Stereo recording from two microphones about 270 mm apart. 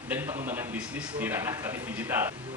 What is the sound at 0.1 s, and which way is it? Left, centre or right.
A man's voice, centre.